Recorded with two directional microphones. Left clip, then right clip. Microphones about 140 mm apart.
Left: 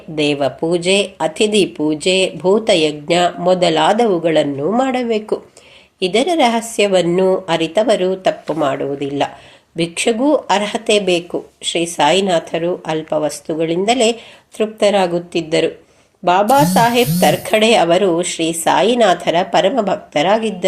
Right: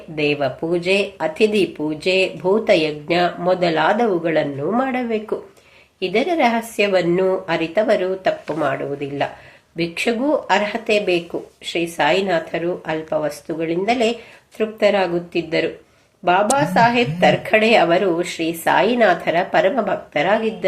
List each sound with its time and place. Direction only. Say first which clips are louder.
0.2 s speech: left 3 dB; 35° left (ahead or behind)